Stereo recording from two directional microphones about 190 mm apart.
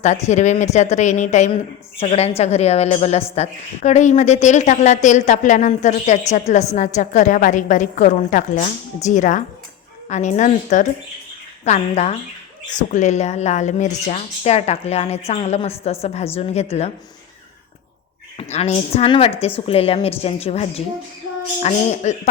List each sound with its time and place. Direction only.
0.0 s speech: 35° left (ahead or behind)
18.3 s speech: 35° left (ahead or behind)